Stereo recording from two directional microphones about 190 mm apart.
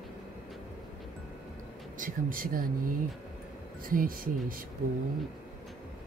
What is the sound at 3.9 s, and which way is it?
Speech, 50° right (ahead or behind).